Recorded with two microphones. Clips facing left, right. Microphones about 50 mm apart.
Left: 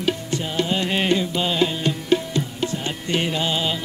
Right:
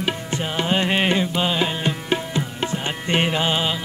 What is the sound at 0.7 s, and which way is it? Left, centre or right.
Music, right.